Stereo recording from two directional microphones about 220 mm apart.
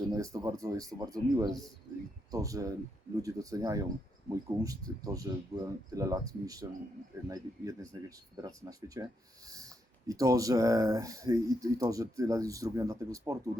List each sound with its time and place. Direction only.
0.1 s speech: 15° right (ahead or behind)
10.1 s speech: 15° right (ahead or behind)